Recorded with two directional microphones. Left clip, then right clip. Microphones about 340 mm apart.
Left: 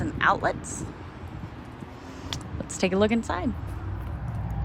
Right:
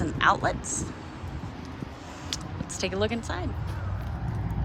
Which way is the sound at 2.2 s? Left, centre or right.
Centre.